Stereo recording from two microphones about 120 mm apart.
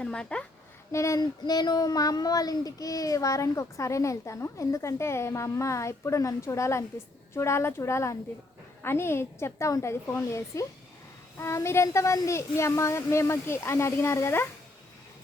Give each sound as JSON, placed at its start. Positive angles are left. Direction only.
{"t": 0.0, "sound": "speech", "side_deg": 10}
{"t": 0.9, "sound": "speech", "side_deg": 25}